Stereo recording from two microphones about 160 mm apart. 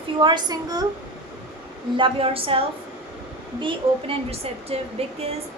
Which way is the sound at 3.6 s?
35° right (ahead or behind).